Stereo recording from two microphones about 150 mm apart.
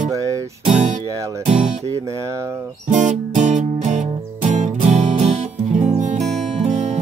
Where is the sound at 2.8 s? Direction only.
55° right (ahead or behind).